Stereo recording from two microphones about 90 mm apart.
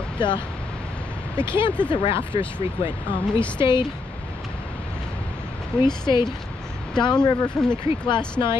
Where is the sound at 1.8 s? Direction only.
75° left (ahead or behind).